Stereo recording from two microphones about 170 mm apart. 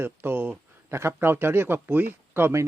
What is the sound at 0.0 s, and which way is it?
Speech, 10° right (ahead or behind).